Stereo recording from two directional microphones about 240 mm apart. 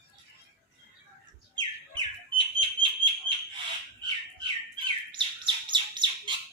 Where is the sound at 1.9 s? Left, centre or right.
Centre.